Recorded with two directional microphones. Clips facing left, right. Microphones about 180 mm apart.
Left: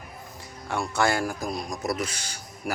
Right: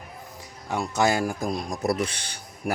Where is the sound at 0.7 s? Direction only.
20° right (ahead or behind).